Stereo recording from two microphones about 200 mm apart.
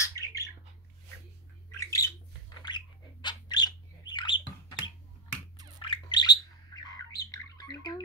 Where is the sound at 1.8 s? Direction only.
15° left (ahead or behind).